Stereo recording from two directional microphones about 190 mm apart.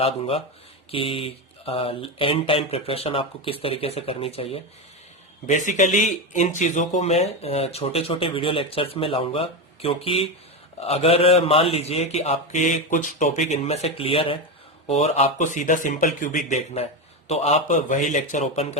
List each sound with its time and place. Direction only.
0.0 s speech: 30° left (ahead or behind)
5.5 s speech: 40° left (ahead or behind)